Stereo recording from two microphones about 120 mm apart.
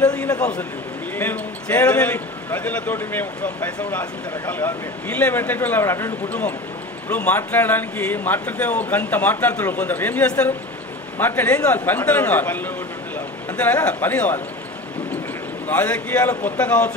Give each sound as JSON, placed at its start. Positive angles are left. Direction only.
{"t": 0.4, "sound": "a man's voice", "side_deg": 10}
{"t": 15.7, "sound": "speech", "side_deg": 10}